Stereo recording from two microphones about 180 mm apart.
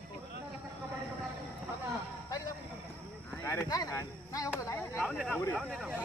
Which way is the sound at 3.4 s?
15° left (ahead or behind).